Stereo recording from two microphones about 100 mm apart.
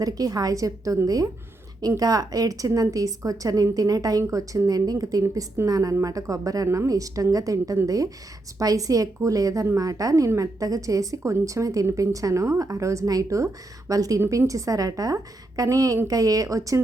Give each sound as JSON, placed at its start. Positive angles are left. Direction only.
{"t": 0.0, "sound": "a woman's voice", "side_deg": -40}